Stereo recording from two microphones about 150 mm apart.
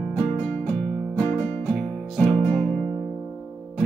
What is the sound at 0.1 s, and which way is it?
Music, 10° left (ahead or behind).